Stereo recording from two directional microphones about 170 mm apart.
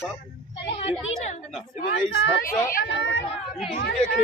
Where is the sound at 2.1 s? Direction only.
90° left.